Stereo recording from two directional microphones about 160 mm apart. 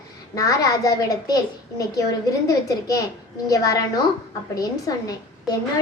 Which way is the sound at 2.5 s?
20° left (ahead or behind).